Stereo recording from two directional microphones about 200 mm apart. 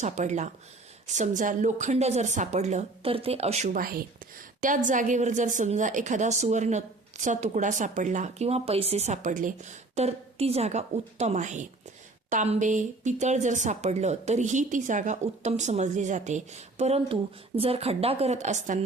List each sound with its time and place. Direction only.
0.0 s a woman's voice: 35° right (ahead or behind)